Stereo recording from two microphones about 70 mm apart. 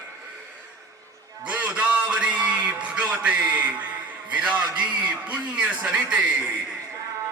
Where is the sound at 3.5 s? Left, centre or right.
Right.